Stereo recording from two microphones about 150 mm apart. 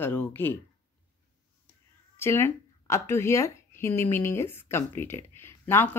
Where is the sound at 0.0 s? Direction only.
10° left (ahead or behind).